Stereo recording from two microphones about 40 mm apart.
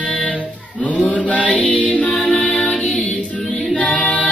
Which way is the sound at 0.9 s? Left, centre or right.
Left.